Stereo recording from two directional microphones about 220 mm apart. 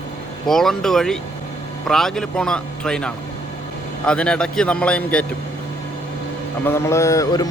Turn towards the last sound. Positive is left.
turn(degrees=15)  # may be behind; listen again after turning